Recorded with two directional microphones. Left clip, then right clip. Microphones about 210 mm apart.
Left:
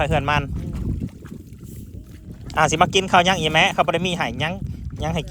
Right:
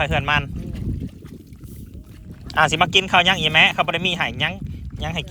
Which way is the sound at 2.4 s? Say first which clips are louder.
Even; 15° left (ahead or behind).